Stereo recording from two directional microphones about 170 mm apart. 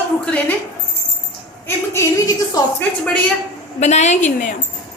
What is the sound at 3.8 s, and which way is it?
Speech, 40° left (ahead or behind).